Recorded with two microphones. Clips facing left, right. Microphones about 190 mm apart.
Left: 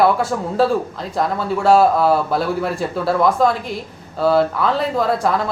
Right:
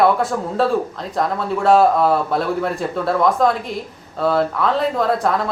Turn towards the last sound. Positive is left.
turn(degrees=0)  # may be behind; listen again after turning